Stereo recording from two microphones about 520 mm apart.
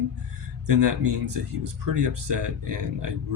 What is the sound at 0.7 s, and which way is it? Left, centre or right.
Speech, right.